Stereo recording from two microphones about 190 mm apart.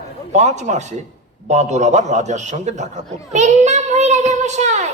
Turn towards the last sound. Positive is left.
turn(degrees=-40)  # may be behind; listen again after turning